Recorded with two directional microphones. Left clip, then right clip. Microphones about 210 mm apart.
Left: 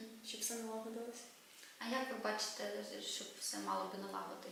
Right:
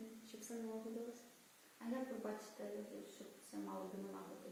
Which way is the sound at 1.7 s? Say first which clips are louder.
Left 6 dB; 10° right (ahead or behind).